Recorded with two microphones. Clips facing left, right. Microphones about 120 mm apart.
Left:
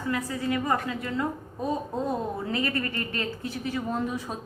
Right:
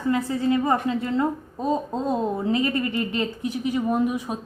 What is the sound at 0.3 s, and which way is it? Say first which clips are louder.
A woman's voice: right 5 dB; 25° right (ahead or behind).